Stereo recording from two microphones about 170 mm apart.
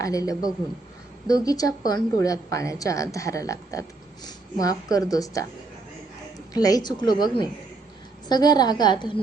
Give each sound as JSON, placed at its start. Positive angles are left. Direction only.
{"t": 0.0, "sound": "a woman's voice", "side_deg": 20}
{"t": 6.5, "sound": "a woman's voice", "side_deg": 20}
{"t": 8.3, "sound": "a woman's voice", "side_deg": 25}